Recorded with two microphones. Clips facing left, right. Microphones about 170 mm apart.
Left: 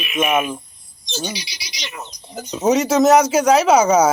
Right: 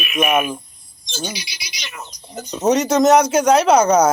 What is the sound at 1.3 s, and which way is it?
Speech, 30° left (ahead or behind).